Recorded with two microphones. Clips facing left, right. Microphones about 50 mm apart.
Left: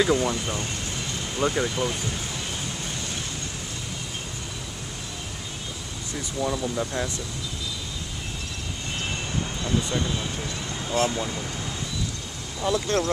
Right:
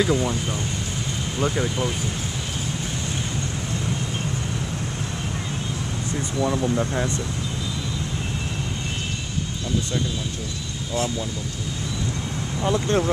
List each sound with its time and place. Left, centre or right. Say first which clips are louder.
0.0 s speech: even; centre
6.6 s speech: right 4 dB; centre
10.9 s speech: left 1 dB; left
12.6 s speech: right 2 dB; right